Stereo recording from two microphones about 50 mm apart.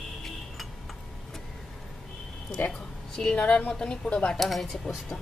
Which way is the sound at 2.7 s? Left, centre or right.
Centre.